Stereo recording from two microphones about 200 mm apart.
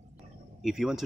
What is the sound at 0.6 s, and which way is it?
Speech, centre (ahead or behind).